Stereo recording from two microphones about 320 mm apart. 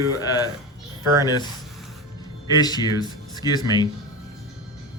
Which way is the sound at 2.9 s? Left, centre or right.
Centre.